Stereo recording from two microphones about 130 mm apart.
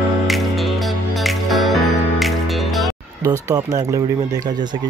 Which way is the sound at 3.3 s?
25° right (ahead or behind).